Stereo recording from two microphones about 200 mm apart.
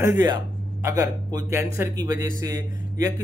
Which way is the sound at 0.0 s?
15° right (ahead or behind).